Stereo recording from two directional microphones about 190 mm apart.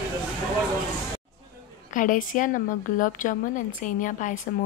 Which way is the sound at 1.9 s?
45° left (ahead or behind).